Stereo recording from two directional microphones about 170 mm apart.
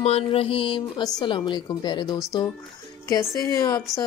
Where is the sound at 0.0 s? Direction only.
35° left (ahead or behind).